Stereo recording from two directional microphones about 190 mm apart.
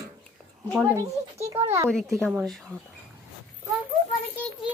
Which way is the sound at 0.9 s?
15° right (ahead or behind).